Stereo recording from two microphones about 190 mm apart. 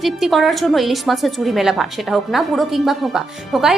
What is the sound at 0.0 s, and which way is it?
A woman's voice, centre (ahead or behind).